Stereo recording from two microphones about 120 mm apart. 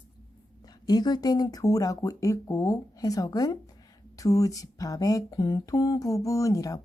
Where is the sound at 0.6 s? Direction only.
35° left (ahead or behind).